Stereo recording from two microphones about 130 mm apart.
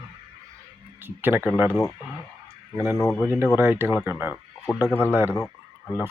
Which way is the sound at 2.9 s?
25° left (ahead or behind).